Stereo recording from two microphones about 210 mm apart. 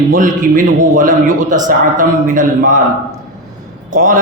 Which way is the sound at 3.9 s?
40° right (ahead or behind).